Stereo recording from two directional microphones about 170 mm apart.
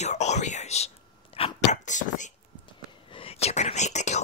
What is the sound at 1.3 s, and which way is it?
Whispering, 40° left (ahead or behind).